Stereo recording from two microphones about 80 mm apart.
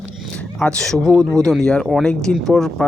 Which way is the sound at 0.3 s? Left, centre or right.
Centre.